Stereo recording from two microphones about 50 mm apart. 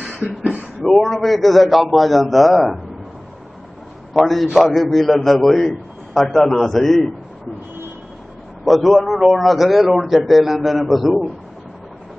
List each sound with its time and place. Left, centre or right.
0.2 s speech: right
0.8 s a man's voice: centre
4.1 s a man's voice: centre
8.6 s a man's voice: centre